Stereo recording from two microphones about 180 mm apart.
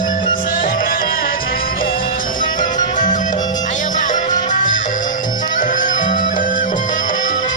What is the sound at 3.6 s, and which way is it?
Music, 45° left (ahead or behind).